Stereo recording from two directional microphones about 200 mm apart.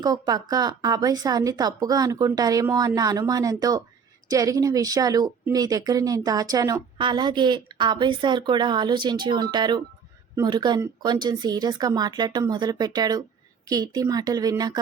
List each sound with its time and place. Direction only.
0.0 s speech: 20° right (ahead or behind)